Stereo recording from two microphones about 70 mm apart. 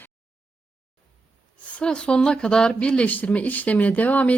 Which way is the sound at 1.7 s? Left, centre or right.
Centre.